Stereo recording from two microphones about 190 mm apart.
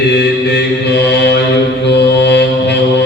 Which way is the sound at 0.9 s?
60° left (ahead or behind).